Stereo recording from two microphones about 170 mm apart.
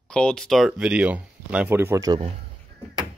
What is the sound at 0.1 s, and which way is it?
Speech, 5° left (ahead or behind).